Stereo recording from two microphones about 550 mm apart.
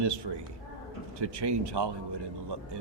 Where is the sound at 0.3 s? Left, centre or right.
Right.